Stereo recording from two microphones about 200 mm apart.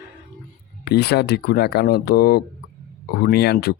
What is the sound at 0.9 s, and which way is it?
Speech, 50° left (ahead or behind).